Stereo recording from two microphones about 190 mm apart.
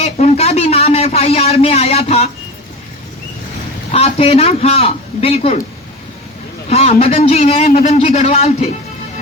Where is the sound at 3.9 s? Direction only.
30° left (ahead or behind).